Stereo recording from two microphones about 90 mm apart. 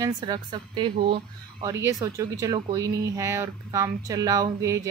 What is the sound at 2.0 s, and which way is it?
Speech, 40° right (ahead or behind).